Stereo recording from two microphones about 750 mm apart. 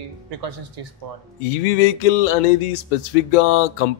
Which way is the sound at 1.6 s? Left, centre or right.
Left.